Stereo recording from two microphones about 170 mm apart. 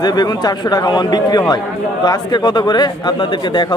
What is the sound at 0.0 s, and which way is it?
Speech, 25° left (ahead or behind).